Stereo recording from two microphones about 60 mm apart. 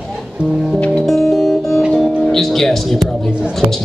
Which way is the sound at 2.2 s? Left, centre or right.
Centre.